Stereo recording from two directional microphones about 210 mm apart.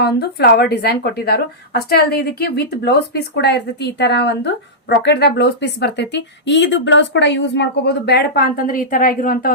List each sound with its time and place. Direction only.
0.0 s speech: 50° left (ahead or behind)